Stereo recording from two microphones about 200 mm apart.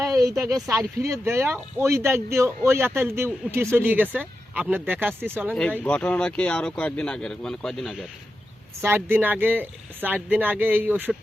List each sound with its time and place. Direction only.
0.0 s a sound: 15° right (ahead or behind)
0.4 s speech: 15° right (ahead or behind)
5.8 s speech: 5° left (ahead or behind)
8.8 s speech: 10° right (ahead or behind)